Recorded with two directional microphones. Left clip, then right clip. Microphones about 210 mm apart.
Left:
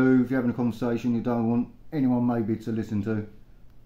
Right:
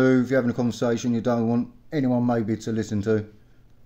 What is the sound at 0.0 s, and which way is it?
Speech, 40° right (ahead or behind).